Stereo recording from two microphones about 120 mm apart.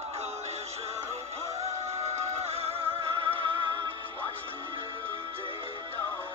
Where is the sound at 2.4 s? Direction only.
60° right (ahead or behind).